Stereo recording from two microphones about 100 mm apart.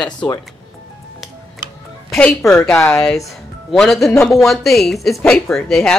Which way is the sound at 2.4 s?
10° left (ahead or behind).